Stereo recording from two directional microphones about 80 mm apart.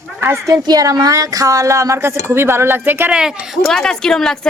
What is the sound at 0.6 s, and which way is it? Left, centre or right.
A woman's voice, right.